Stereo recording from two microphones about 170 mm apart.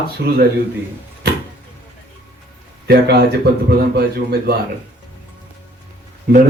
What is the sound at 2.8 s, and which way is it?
Speech, 70° right (ahead or behind).